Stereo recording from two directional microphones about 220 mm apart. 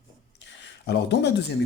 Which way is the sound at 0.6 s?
50° left (ahead or behind).